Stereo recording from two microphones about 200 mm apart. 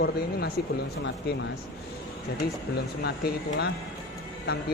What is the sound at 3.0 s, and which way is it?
Speech, 55° left (ahead or behind).